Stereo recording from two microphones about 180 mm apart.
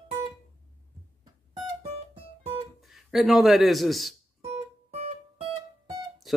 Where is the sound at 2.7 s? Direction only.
Centre (ahead or behind).